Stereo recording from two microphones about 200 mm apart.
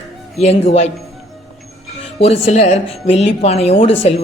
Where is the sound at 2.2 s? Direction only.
35° left (ahead or behind).